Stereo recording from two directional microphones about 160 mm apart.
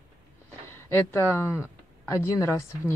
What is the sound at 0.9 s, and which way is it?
Speech, 15° left (ahead or behind).